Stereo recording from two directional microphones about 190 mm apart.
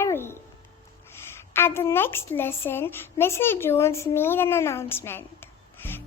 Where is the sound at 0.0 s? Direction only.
15° left (ahead or behind).